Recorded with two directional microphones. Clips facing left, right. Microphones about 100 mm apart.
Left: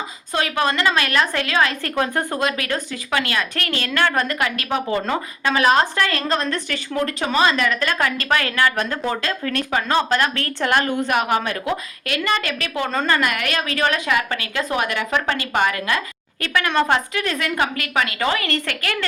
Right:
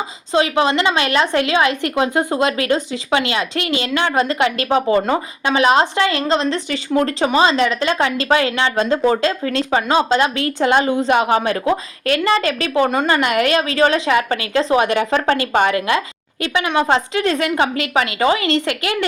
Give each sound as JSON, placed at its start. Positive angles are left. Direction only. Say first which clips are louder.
{"t": 0.3, "sound": "a woman's voice", "louder": "right 5 dB", "side_deg": -20}
{"t": 12.9, "sound": "a woman's voice", "louder": "right 4 dB", "side_deg": -20}
{"t": 16.4, "sound": "a woman's voice", "louder": "right 2 dB", "side_deg": -15}